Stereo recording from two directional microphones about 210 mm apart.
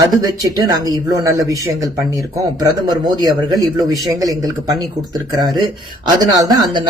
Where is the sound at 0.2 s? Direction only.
20° right (ahead or behind).